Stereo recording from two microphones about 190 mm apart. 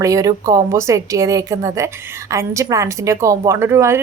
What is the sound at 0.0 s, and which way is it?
A woman's voice, 15° right (ahead or behind).